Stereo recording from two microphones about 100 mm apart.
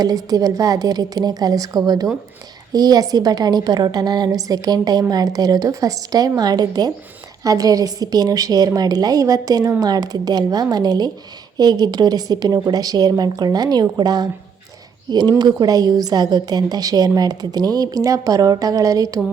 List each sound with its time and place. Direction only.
0.0 s a woman's voice: 40° right (ahead or behind)